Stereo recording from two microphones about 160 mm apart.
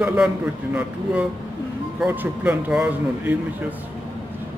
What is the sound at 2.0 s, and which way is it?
Speech, 10° right (ahead or behind).